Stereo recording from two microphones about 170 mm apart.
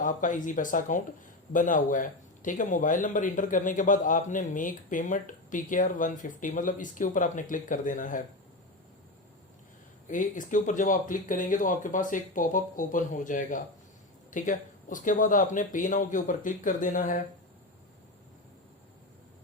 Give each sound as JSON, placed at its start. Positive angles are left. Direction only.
{"t": 0.0, "sound": "a man's voice", "side_deg": 50}
{"t": 10.1, "sound": "a man's voice", "side_deg": 50}